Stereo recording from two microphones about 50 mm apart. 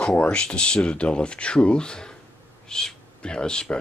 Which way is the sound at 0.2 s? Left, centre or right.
Left.